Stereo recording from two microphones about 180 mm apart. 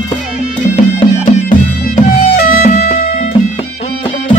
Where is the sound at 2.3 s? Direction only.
55° left (ahead or behind).